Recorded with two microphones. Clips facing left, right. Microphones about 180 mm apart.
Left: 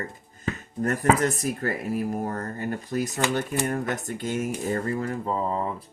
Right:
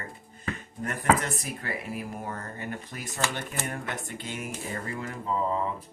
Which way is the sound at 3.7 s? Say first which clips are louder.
Left 7 dB; 40° left (ahead or behind).